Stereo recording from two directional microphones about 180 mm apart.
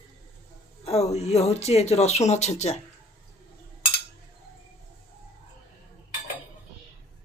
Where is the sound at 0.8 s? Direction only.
35° left (ahead or behind).